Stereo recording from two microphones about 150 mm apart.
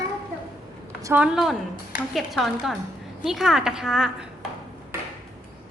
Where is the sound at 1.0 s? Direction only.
10° right (ahead or behind).